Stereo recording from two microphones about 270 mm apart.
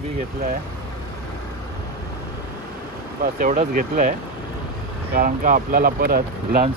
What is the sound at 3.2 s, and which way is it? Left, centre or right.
Speech, right.